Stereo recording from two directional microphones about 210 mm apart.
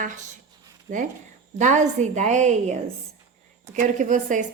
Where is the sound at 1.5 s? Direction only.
35° right (ahead or behind).